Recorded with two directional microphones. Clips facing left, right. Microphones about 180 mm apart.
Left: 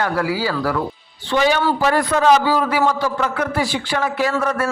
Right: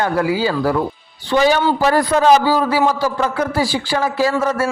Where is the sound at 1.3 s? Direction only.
40° right (ahead or behind).